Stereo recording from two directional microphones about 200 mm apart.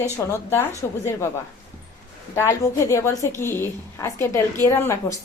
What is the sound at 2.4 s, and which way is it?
Speech, 15° left (ahead or behind).